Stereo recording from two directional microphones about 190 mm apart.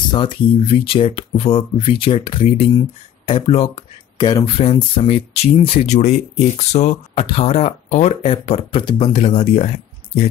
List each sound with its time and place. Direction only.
0.1 s speech: 25° left (ahead or behind)